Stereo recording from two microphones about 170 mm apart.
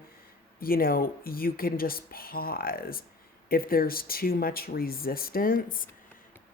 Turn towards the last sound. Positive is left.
turn(degrees=55)  # may be behind; listen again after turning